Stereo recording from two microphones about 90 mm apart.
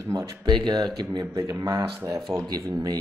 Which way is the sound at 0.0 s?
35° right (ahead or behind).